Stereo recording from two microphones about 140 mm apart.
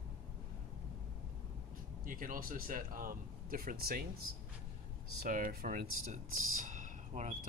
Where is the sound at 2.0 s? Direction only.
75° right (ahead or behind).